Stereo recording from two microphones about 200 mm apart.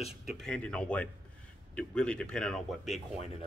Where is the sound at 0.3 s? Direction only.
5° left (ahead or behind).